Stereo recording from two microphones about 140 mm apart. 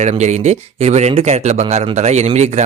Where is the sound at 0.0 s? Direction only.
55° right (ahead or behind).